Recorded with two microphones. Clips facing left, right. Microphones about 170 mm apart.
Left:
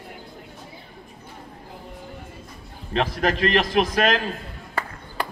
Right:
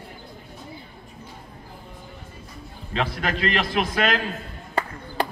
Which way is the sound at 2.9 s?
40° left (ahead or behind).